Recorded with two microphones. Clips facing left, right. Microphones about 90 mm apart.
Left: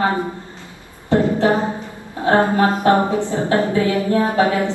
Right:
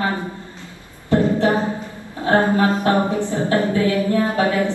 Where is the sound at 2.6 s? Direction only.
20° left (ahead or behind).